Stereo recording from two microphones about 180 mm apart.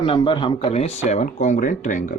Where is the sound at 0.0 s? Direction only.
30° left (ahead or behind).